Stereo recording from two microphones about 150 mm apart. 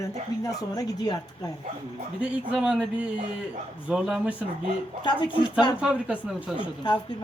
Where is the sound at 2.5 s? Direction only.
5° right (ahead or behind).